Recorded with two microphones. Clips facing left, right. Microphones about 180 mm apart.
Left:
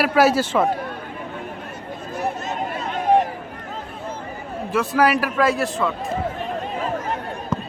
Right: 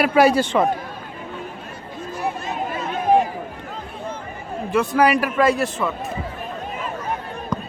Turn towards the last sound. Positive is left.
turn(degrees=5)  # may be behind; listen again after turning